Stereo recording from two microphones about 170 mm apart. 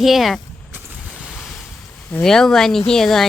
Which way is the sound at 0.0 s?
Centre (ahead or behind).